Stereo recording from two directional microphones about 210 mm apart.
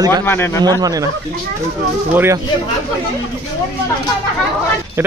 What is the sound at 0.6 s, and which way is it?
Speech, 15° right (ahead or behind).